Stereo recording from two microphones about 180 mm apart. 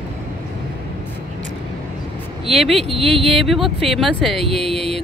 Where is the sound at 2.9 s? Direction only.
30° right (ahead or behind).